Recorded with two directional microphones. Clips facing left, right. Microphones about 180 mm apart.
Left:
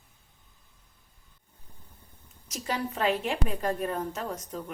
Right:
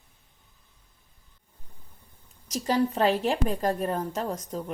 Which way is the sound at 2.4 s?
35° right (ahead or behind).